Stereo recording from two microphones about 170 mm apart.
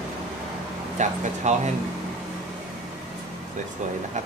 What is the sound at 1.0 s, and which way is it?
Speech, 45° right (ahead or behind).